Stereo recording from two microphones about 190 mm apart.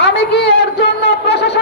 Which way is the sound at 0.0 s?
60° left (ahead or behind).